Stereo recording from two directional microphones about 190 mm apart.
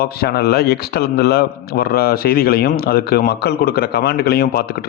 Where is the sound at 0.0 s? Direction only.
55° left (ahead or behind).